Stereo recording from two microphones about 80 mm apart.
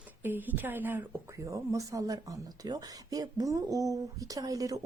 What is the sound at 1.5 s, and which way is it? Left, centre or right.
Speech, right.